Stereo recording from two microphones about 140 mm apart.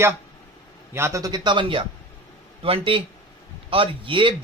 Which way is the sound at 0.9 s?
20° right (ahead or behind).